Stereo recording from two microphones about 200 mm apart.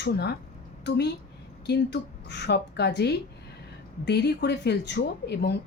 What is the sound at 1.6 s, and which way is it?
Speech, 55° left (ahead or behind).